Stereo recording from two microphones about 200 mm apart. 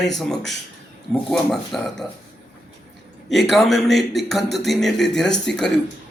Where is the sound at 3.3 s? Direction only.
Centre (ahead or behind).